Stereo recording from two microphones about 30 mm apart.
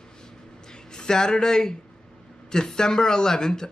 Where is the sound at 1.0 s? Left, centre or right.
Left.